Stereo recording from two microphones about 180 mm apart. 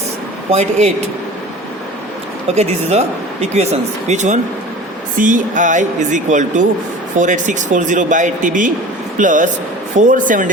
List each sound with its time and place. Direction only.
0.5 s speech: 40° right (ahead or behind)
2.5 s speech: 35° right (ahead or behind)